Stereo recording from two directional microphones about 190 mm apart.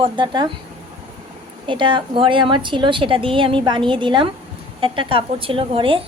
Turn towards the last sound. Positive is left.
turn(degrees=-30)  # may be behind; listen again after turning